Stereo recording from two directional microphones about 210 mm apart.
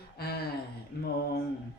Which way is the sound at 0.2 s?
50° left (ahead or behind).